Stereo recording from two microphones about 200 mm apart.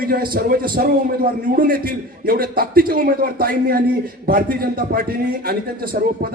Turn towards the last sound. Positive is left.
turn(degrees=-50)  # may be behind; listen again after turning